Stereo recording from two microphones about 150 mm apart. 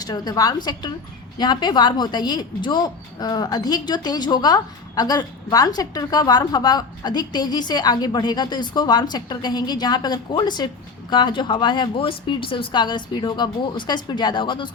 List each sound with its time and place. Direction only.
0.0 s a woman's voice: 25° left (ahead or behind)